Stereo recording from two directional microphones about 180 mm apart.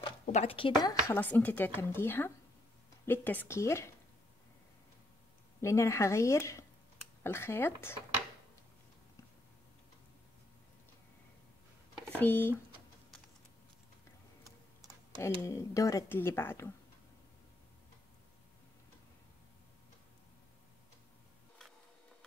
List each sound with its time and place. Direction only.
0.0 s a sound: 35° left (ahead or behind)
0.8 s speech: 15° left (ahead or behind)
5.6 s speech: 15° left (ahead or behind)
12.2 s speech: 10° left (ahead or behind)
15.4 s speech: 15° left (ahead or behind)